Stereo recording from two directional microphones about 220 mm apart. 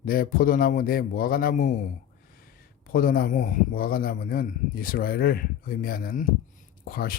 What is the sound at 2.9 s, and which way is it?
Speech, 40° left (ahead or behind).